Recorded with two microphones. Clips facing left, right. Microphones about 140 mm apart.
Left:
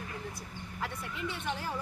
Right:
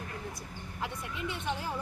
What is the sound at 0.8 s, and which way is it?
Speech, 20° right (ahead or behind).